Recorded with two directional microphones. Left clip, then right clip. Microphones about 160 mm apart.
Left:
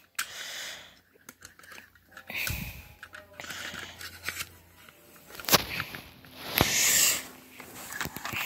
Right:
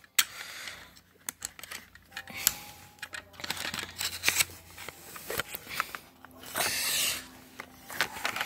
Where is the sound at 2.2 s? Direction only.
Centre (ahead or behind).